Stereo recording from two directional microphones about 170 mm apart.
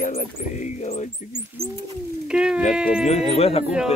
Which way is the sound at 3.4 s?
35° left (ahead or behind).